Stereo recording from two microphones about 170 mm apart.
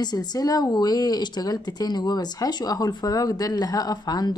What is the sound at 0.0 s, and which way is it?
Speech, 25° left (ahead or behind).